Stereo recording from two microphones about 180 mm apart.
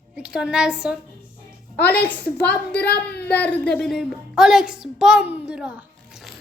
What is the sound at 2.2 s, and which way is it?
Speech, 65° left (ahead or behind).